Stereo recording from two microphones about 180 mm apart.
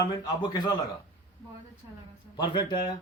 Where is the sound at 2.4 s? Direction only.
25° left (ahead or behind).